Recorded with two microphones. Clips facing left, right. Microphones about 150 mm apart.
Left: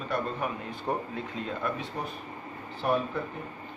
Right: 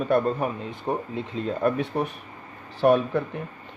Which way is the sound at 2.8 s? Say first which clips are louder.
Right 9 dB; 80° right.